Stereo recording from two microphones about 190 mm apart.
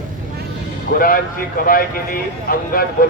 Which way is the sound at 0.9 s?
50° left (ahead or behind).